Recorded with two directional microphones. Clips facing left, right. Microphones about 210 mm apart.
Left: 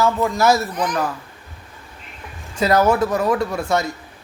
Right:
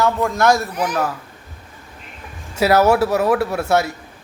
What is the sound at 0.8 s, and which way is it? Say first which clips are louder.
Speech: right 1 dB; 10° right (ahead or behind).